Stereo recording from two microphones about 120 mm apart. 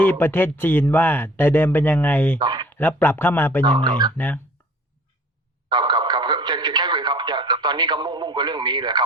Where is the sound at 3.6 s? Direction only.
40° right (ahead or behind).